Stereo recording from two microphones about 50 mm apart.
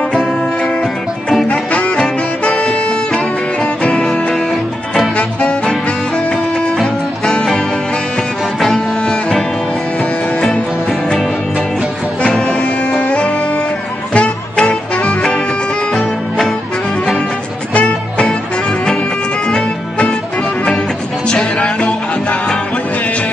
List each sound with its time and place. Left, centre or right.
1.5 s music: centre
5.1 s music: left
8.5 s music: centre
12.2 s music: centre
15.9 s music: centre
17.7 s music: left
21.3 s music: centre